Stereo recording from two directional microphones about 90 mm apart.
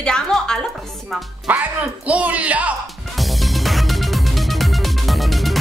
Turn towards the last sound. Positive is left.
turn(degrees=0)  # may be behind; listen again after turning